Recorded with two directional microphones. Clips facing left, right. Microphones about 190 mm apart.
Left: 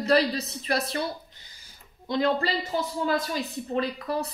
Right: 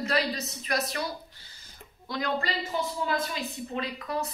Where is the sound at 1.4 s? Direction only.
20° left (ahead or behind).